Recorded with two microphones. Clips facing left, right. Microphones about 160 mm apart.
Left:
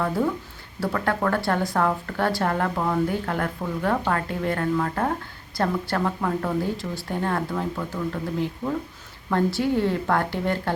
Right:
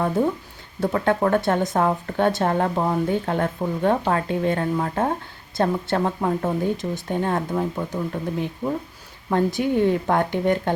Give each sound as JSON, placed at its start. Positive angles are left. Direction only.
{"t": 0.8, "sound": "speech", "side_deg": -20}